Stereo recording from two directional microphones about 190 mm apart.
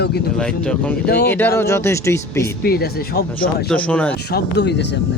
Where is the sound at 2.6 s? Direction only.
55° left (ahead or behind).